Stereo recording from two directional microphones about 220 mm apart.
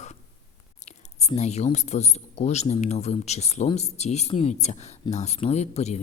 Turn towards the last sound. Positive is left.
turn(degrees=30)  # may be behind; listen again after turning